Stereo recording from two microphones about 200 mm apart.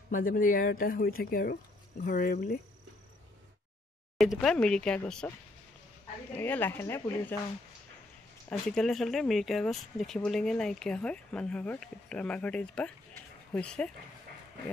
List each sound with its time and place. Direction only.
0.1 s speech: 40° left (ahead or behind)
4.2 s speech: centre (ahead or behind)
6.3 s speech: 10° left (ahead or behind)
8.5 s speech: 5° left (ahead or behind)